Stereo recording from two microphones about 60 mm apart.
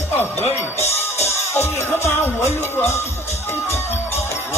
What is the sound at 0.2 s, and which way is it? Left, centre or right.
Music, left.